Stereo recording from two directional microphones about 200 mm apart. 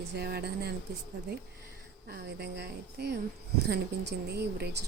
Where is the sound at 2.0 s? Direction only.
55° right (ahead or behind).